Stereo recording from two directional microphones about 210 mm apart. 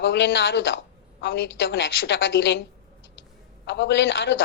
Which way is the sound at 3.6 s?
55° left (ahead or behind).